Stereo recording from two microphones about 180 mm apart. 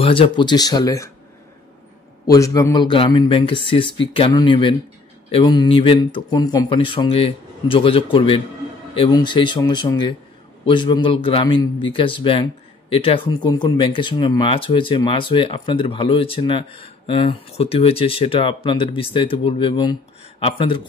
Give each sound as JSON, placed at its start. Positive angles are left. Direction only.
{"t": 0.0, "sound": "speech", "side_deg": 30}
{"t": 2.3, "sound": "speech", "side_deg": 20}